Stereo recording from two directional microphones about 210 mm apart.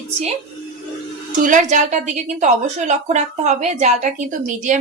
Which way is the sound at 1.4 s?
35° right (ahead or behind).